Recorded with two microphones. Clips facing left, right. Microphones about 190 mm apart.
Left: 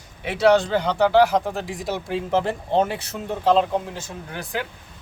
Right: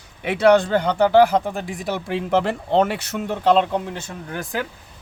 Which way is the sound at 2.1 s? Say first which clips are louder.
Right 2 dB; 70° right (ahead or behind).